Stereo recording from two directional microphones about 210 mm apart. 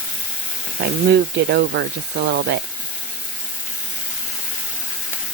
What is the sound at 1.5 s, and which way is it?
Speech, 55° right (ahead or behind).